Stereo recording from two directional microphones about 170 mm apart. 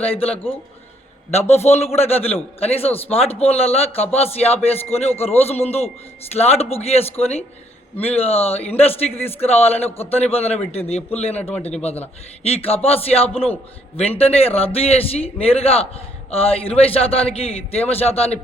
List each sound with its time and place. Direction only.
0.0 s speech: 35° left (ahead or behind)